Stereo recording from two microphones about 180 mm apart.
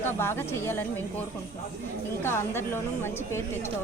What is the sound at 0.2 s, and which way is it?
Speech, 15° left (ahead or behind).